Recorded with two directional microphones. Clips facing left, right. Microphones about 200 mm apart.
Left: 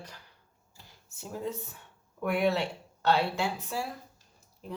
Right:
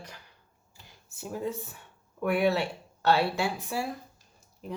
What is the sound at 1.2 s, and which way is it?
Speech, 10° right (ahead or behind).